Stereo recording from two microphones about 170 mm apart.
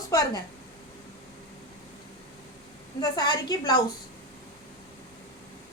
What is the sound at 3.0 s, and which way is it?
Speech, 25° left (ahead or behind).